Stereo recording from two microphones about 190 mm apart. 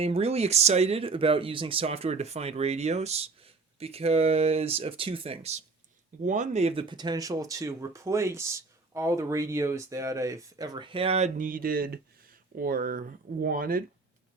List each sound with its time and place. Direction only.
0.0 s speech: 30° right (ahead or behind); by 13.8 s 50° right (ahead or behind)